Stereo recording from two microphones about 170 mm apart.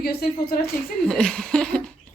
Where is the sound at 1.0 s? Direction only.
5° left (ahead or behind).